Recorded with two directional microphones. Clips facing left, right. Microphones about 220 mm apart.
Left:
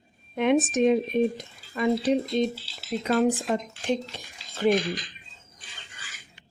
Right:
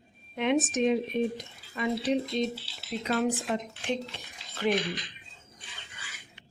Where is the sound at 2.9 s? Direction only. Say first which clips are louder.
Left 5 dB; 45° left (ahead or behind).